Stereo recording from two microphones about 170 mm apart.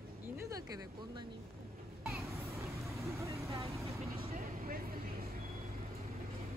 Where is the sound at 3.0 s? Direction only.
15° right (ahead or behind).